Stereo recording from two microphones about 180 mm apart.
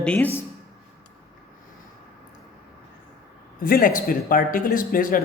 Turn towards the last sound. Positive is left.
turn(degrees=50)  # may be behind; listen again after turning